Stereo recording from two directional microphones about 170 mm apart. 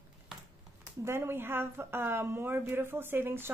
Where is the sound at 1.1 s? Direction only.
15° right (ahead or behind).